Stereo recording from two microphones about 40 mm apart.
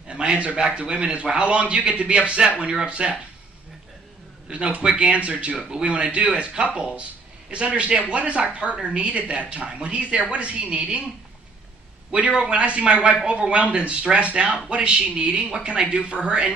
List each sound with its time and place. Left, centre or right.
0.1 s a sound: right
0.6 s a man's voice: right
4.5 s a man's voice: right
12.1 s a man's voice: right